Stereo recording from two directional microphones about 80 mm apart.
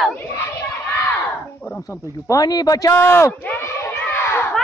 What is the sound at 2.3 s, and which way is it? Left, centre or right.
Speech, left.